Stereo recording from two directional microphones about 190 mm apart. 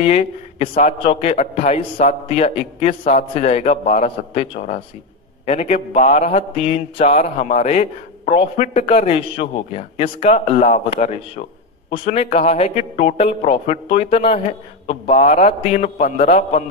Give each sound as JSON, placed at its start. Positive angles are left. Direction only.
{"t": 0.0, "sound": "speech", "side_deg": 30}